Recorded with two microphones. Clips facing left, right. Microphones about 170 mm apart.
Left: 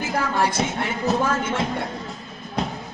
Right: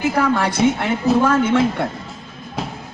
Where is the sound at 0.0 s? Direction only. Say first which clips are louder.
Right 5 dB; 60° right (ahead or behind).